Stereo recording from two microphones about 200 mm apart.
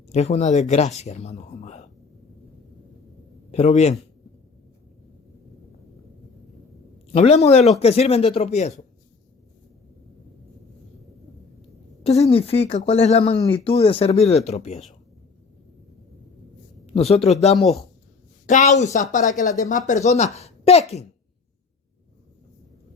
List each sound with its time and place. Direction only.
0.1 s speech: 35° left (ahead or behind)
3.5 s speech: 35° left (ahead or behind)
7.1 s speech: 35° left (ahead or behind)
12.0 s speech: 30° left (ahead or behind)
16.8 s speech: 30° left (ahead or behind)
18.4 s speech: 35° left (ahead or behind)
19.4 s speech: 15° left (ahead or behind)
19.6 s speech: 40° left (ahead or behind)